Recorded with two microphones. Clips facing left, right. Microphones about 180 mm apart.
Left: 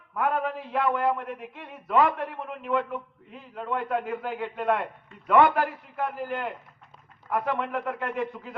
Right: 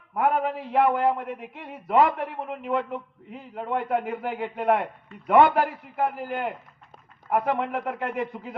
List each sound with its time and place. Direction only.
0.1 s a man's voice: 25° right (ahead or behind)